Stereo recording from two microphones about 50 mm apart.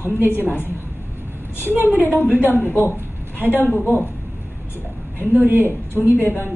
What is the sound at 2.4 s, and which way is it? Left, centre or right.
Speech, right.